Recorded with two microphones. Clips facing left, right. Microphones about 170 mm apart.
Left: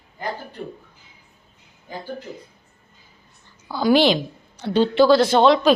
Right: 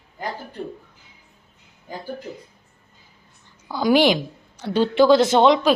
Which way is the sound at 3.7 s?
15° right (ahead or behind).